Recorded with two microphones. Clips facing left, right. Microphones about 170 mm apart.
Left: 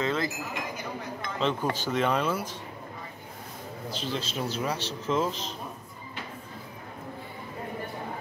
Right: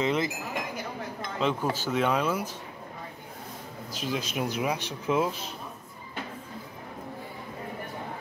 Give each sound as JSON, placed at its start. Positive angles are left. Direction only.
{"t": 0.0, "sound": "chink", "side_deg": -20}
{"t": 1.4, "sound": "speech", "side_deg": -10}
{"t": 3.9, "sound": "speech", "side_deg": -10}